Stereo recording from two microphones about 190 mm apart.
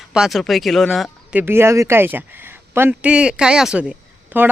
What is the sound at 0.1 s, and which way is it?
Speech, centre (ahead or behind).